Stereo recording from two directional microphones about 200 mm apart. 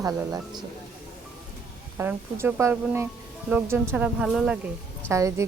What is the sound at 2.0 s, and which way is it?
A woman's voice, 10° right (ahead or behind).